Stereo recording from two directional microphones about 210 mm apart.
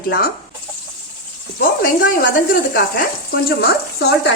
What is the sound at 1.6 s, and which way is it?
Speech, 40° left (ahead or behind).